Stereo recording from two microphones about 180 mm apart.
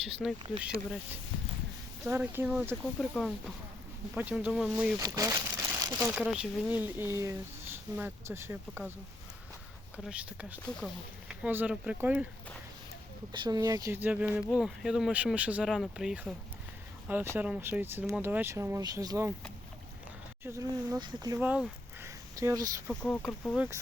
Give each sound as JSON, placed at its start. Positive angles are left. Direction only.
{"t": 0.2, "sound": "speech", "side_deg": 0}
{"t": 10.0, "sound": "speech", "side_deg": -5}
{"t": 13.3, "sound": "speech", "side_deg": -25}
{"t": 17.3, "sound": "speech", "side_deg": -10}
{"t": 20.4, "sound": "speech", "side_deg": -15}
{"t": 21.3, "sound": "a sound", "side_deg": -5}
{"t": 22.4, "sound": "speech", "side_deg": -20}
{"t": 22.9, "sound": "speech", "side_deg": 5}
{"t": 23.6, "sound": "speech", "side_deg": -10}